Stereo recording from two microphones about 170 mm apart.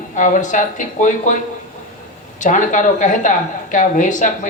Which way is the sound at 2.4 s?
45° left (ahead or behind).